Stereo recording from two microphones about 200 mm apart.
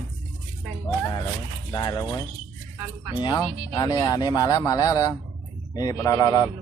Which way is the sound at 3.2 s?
20° left (ahead or behind).